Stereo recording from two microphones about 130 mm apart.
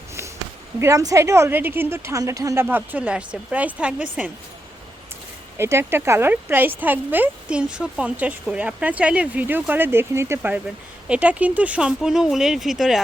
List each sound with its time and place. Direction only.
0.8 s a woman's voice: 25° right (ahead or behind)
2.6 s speech: 15° right (ahead or behind)
5.5 s speech: 20° right (ahead or behind); by 13.0 s centre (ahead or behind)